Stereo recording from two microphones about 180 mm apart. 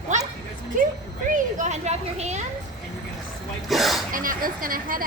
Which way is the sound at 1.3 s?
45° right (ahead or behind).